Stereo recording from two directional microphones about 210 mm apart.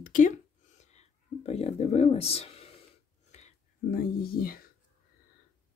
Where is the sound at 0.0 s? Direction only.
40° left (ahead or behind).